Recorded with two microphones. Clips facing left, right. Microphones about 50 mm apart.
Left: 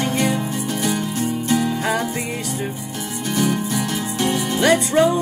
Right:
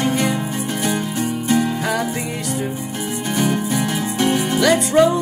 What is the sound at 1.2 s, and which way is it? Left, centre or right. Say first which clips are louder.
Music: right 1 dB; right.